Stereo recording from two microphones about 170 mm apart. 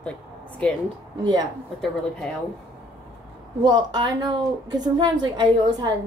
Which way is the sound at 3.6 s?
25° right (ahead or behind).